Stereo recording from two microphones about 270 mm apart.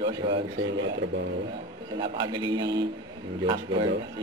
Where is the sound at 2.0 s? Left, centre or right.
Centre.